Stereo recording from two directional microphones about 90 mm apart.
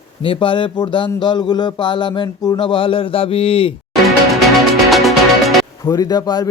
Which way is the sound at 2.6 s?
70° left (ahead or behind).